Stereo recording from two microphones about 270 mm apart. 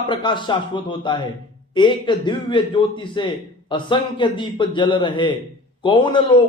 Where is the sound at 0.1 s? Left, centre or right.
Centre.